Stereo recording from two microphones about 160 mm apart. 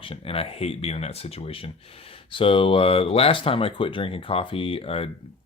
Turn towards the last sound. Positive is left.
turn(degrees=40)  # may be behind; listen again after turning